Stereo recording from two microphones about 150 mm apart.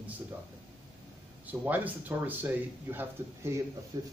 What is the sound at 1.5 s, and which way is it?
Speech, 10° right (ahead or behind).